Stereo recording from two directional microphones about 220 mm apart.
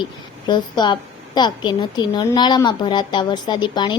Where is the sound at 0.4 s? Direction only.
20° left (ahead or behind).